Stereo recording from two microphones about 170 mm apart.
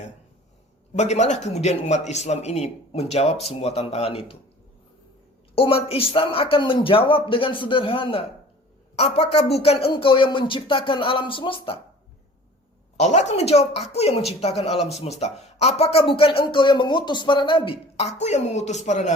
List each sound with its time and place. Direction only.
0.9 s a woman's voice: 40° left (ahead or behind)
5.5 s a woman's voice: 35° left (ahead or behind)
13.0 s a woman's voice: 40° left (ahead or behind)